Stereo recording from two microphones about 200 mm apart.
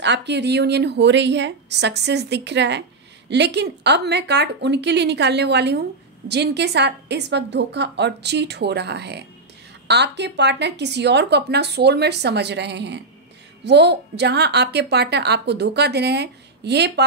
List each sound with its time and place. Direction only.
0.0 s speech: 60° right (ahead or behind)